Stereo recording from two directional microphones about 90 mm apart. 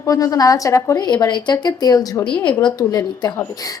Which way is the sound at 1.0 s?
55° left (ahead or behind).